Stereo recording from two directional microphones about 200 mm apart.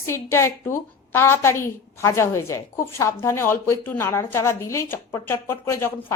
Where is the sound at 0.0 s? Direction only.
15° left (ahead or behind).